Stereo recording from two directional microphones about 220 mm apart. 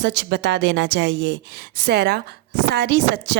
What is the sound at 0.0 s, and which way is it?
A woman's voice, 50° right (ahead or behind).